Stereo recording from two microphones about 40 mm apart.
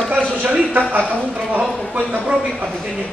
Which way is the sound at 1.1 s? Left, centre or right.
Right.